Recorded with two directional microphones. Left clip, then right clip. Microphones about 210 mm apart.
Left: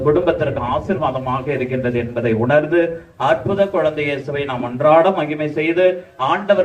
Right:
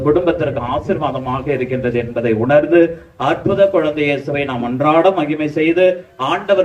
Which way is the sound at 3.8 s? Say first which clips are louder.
Right 2 dB; 40° right (ahead or behind).